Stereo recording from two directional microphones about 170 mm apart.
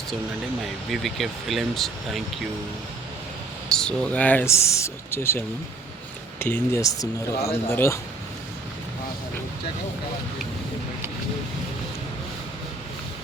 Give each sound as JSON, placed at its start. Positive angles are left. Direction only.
{"t": 0.6, "sound": "speech", "side_deg": 0}
{"t": 3.7, "sound": "speech", "side_deg": 5}
{"t": 6.4, "sound": "speech", "side_deg": 15}